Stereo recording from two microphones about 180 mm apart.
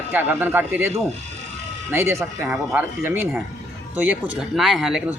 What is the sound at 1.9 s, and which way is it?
Speech, 15° right (ahead or behind).